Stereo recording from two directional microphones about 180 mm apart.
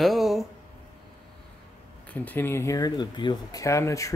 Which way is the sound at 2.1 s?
10° left (ahead or behind).